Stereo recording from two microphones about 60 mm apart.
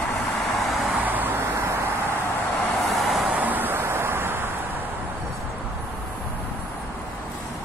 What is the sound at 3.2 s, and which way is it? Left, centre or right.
Vehicle, right.